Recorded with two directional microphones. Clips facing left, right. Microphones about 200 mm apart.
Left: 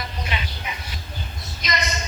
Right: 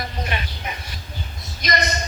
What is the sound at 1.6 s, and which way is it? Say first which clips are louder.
Speech: right 4 dB; 60° right (ahead or behind).